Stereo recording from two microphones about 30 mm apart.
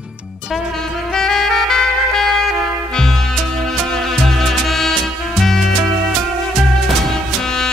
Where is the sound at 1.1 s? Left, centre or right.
Centre.